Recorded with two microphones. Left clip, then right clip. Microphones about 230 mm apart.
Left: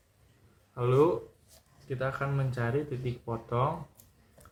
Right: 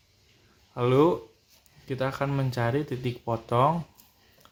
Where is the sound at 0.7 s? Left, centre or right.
Right.